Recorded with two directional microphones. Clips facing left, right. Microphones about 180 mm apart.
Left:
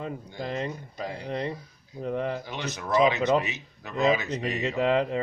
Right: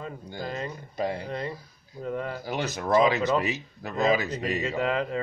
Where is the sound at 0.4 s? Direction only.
25° left (ahead or behind).